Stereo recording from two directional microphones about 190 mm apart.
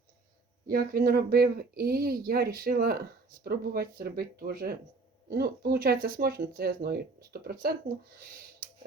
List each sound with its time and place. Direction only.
0.7 s speech: 50° right (ahead or behind)